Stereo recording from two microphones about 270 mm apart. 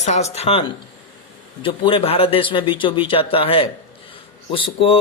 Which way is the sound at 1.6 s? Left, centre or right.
Centre.